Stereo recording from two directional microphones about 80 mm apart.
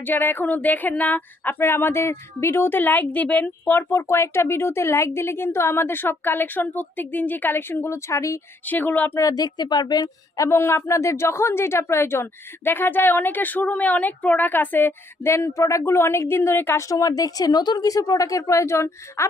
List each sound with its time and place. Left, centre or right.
0.0 s speech: left
8.6 s speech: left
9.1 s speech: left
10.3 s speech: left
16.9 s speech: left